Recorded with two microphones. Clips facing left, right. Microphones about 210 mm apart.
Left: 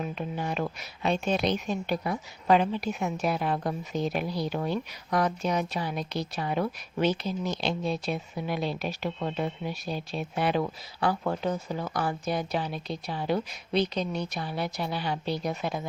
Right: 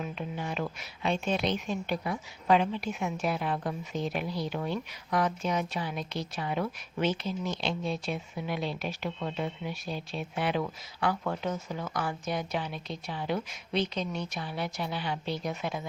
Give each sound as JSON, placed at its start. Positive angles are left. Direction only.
{"t": 0.0, "sound": "a woman's voice", "side_deg": 40}